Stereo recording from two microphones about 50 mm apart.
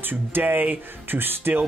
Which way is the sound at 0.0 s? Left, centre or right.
Right.